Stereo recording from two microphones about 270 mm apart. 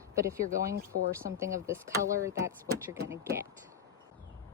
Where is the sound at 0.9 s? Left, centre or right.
Left.